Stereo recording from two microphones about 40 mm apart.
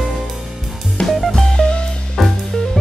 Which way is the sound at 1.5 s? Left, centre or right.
Left.